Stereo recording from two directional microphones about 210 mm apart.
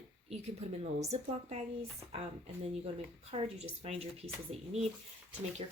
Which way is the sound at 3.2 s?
30° right (ahead or behind).